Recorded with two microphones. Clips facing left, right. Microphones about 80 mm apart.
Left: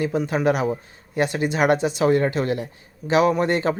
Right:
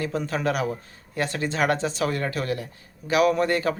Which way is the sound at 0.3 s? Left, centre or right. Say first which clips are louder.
Left 4 dB; left.